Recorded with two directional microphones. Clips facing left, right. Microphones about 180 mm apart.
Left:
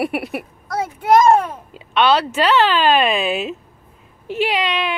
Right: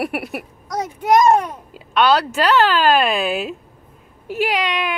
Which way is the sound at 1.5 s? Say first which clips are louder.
Even; centre (ahead or behind).